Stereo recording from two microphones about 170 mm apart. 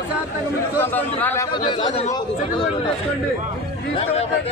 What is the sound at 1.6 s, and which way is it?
Speech, 30° left (ahead or behind).